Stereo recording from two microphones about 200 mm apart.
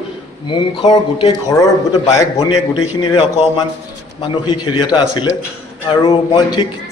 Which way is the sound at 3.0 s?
25° left (ahead or behind).